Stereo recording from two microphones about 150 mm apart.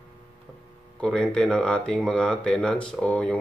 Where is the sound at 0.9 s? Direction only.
5° left (ahead or behind).